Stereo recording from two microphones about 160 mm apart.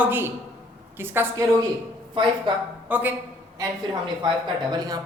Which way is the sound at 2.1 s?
30° right (ahead or behind).